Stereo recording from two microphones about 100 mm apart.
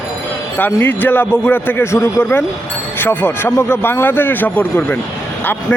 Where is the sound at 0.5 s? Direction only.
20° left (ahead or behind).